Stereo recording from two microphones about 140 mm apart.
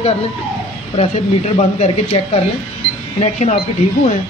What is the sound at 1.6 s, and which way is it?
Speech, 50° left (ahead or behind).